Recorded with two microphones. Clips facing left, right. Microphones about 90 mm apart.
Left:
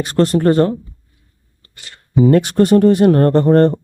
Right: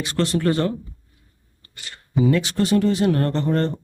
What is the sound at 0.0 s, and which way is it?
Speech, 45° left (ahead or behind).